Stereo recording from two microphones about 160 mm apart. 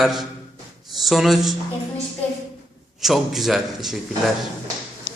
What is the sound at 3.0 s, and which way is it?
A man's voice, centre (ahead or behind).